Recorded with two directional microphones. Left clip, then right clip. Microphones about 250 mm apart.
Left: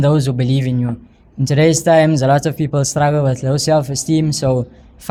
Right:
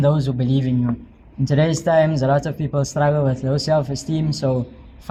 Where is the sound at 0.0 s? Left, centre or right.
Left.